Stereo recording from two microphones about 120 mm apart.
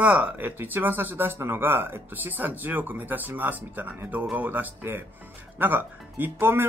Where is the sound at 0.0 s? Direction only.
15° right (ahead or behind).